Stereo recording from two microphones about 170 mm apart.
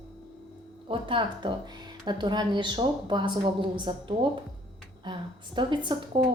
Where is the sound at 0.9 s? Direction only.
30° right (ahead or behind).